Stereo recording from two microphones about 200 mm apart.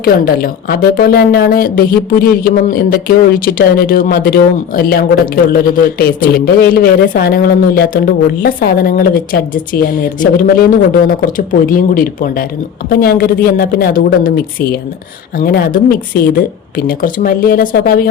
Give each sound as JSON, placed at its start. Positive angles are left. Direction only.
{"t": 0.0, "sound": "speech", "side_deg": 50}